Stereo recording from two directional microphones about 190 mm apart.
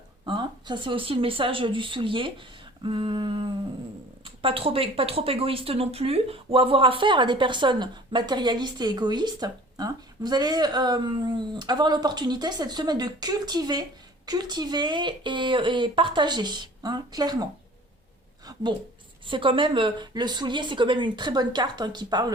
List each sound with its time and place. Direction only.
0.3 s speech: 25° right (ahead or behind)
19.3 s speech: 25° right (ahead or behind)